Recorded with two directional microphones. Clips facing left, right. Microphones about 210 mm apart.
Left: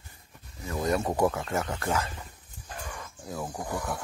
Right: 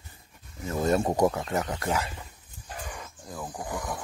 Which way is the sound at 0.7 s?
25° right (ahead or behind).